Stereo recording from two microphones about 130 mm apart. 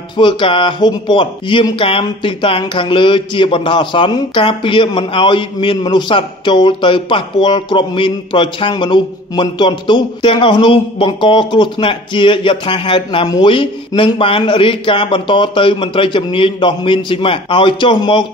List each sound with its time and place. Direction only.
0.2 s speech: 40° left (ahead or behind)